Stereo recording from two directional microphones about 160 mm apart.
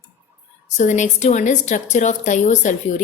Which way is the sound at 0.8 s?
50° left (ahead or behind).